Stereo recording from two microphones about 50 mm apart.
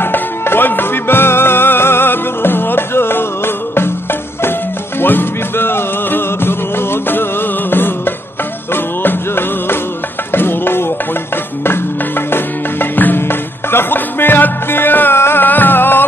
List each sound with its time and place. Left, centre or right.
0.0 s music: left
12.3 s music: left
15.4 s music: left